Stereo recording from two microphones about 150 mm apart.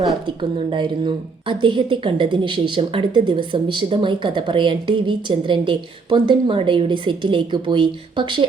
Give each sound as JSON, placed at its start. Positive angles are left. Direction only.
{"t": 0.3, "sound": "speech", "side_deg": -35}